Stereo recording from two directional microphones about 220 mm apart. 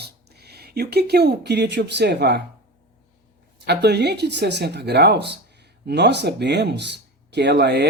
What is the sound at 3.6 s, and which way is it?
Speech, 50° right (ahead or behind).